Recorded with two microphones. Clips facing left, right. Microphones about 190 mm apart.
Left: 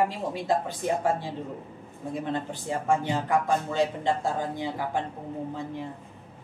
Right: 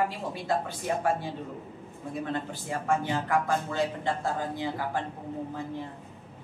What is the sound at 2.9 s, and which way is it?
Speech, 15° left (ahead or behind).